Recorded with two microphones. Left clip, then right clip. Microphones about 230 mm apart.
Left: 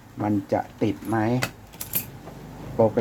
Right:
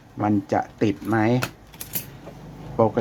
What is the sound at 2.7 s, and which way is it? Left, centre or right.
Speech, right.